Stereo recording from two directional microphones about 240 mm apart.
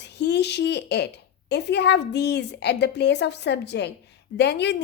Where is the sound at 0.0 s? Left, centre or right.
Left.